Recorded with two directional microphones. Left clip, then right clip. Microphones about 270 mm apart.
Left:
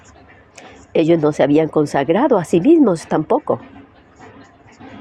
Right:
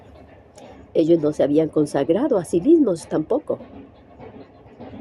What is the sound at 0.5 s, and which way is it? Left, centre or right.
Speech, left.